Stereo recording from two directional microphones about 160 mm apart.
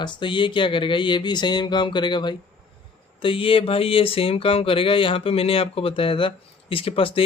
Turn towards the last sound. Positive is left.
turn(degrees=35)  # may be behind; listen again after turning